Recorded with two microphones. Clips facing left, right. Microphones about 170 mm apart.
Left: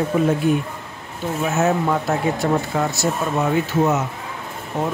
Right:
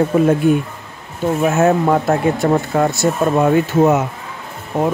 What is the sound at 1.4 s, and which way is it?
Speech, 55° right (ahead or behind).